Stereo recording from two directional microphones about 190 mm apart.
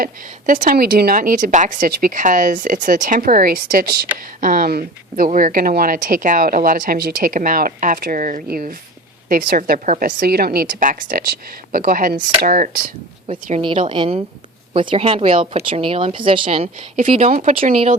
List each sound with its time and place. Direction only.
0.0 s speech: 45° right (ahead or behind)
13.2 s speech: 30° right (ahead or behind)